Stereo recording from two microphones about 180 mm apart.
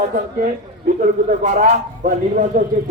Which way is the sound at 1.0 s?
40° right (ahead or behind).